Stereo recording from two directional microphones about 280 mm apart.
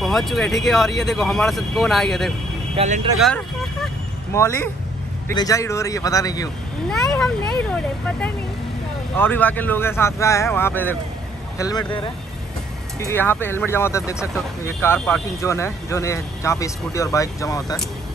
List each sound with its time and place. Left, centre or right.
0.0 s speech: centre
2.7 s speech: right
3.2 s speech: centre
6.9 s speech: centre
13.1 s speech: centre